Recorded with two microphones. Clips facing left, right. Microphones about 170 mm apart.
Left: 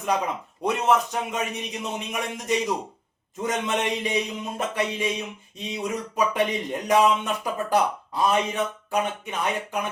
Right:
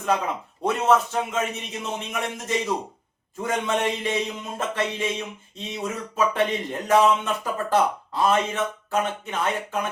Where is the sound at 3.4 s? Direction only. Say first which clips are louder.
Right 1 dB; 20° left (ahead or behind).